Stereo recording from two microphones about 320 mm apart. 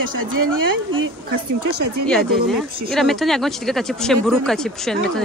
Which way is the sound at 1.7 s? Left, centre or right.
Right.